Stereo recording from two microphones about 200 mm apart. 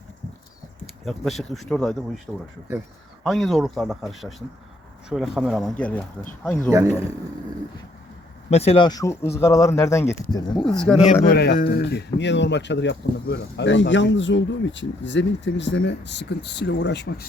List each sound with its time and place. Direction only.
1.0 s speech: centre (ahead or behind)
3.2 s speech: centre (ahead or behind)
6.7 s a man's voice: 15° right (ahead or behind)
8.4 s speech: 30° left (ahead or behind)
10.8 s speech: 5° left (ahead or behind)
11.3 s a man's voice: 55° left (ahead or behind)